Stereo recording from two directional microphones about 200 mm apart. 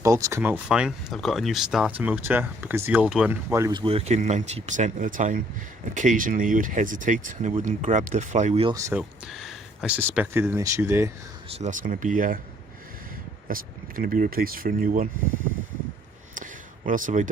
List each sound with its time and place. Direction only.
0.0 s speech: 15° right (ahead or behind); by 8.7 s 35° right (ahead or behind)
8.7 s speech: 15° right (ahead or behind)
9.0 s speech: centre (ahead or behind)
11.5 s speech: 40° right (ahead or behind)
13.5 s speech: 45° right (ahead or behind)
16.3 s a sound: 40° right (ahead or behind)